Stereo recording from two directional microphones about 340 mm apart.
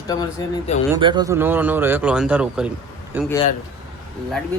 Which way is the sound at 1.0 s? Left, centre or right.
Centre.